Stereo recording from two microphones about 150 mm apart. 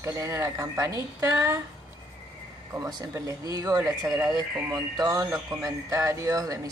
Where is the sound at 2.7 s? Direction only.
20° right (ahead or behind).